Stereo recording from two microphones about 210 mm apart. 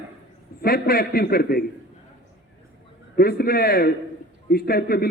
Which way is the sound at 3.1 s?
45° left (ahead or behind).